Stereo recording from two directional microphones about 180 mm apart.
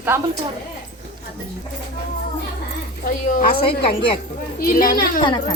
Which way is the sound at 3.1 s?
50° left (ahead or behind).